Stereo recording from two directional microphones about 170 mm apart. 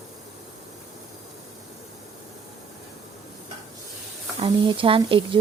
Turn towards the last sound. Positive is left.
turn(degrees=-30)  # may be behind; listen again after turning